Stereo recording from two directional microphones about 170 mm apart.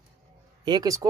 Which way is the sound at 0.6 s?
25° right (ahead or behind).